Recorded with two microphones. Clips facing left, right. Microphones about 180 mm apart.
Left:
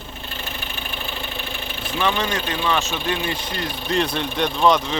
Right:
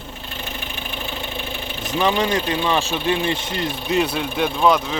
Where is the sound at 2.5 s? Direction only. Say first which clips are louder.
Right 2 dB; 30° right (ahead or behind).